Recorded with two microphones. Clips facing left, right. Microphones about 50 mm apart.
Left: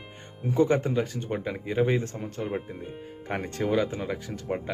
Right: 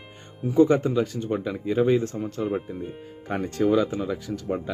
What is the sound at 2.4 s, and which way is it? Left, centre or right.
Speech, centre.